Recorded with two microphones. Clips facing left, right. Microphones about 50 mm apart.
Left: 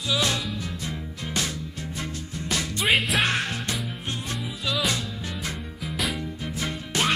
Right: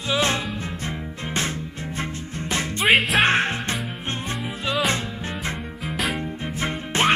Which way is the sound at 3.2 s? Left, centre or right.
Right.